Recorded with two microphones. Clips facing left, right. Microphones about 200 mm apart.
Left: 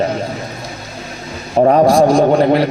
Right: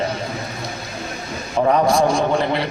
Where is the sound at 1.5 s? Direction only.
35° left (ahead or behind).